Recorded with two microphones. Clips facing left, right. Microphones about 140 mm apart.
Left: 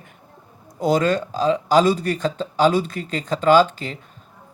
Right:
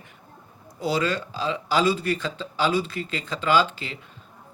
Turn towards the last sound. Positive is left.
turn(degrees=45)  # may be behind; listen again after turning